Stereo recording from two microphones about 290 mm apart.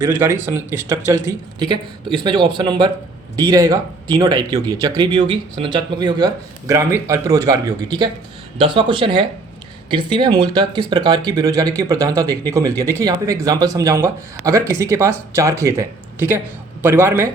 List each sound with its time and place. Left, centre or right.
0.0 s speech: centre